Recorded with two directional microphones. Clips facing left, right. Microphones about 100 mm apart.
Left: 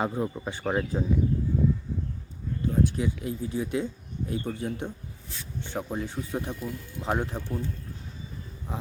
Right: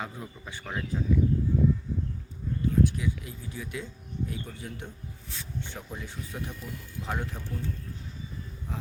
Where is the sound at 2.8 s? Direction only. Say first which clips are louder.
Left 2 dB; 30° left (ahead or behind).